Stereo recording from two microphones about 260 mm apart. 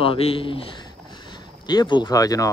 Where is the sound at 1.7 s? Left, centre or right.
Centre.